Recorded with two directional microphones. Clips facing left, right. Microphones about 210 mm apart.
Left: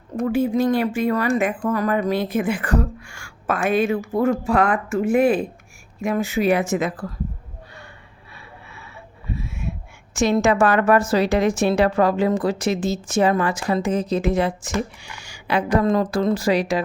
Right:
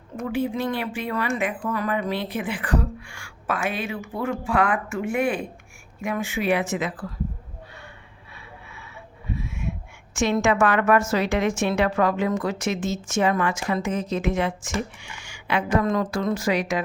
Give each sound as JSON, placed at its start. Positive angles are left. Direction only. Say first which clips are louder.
{"t": 0.2, "sound": "a woman's voice", "louder": "left 6 dB", "side_deg": 45}
{"t": 10.2, "sound": "a woman's voice", "louder": "left 3 dB", "side_deg": 35}